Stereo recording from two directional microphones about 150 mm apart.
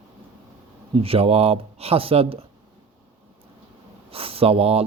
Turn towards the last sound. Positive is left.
turn(degrees=-40)  # may be behind; listen again after turning